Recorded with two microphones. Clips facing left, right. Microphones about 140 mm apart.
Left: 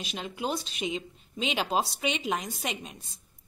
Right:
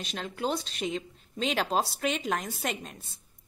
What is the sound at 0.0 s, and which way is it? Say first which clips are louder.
A woman's voice: right 1 dB; 5° left (ahead or behind).